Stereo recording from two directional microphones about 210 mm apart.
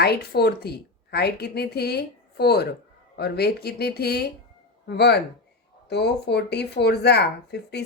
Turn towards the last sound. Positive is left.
turn(degrees=50)  # may be behind; listen again after turning